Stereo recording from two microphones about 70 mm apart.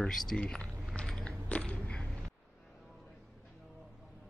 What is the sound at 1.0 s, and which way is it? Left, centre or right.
Biting, centre.